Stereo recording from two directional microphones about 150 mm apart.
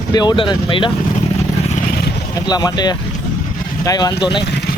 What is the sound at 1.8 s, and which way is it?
Vehicle, 85° left.